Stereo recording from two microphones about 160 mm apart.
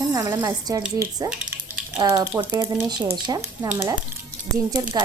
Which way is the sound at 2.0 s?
25° right (ahead or behind).